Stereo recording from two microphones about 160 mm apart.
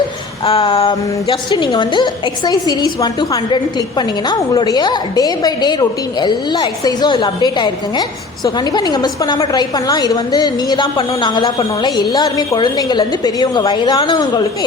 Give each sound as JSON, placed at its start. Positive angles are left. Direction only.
{"t": 0.4, "sound": "a woman's voice", "side_deg": 35}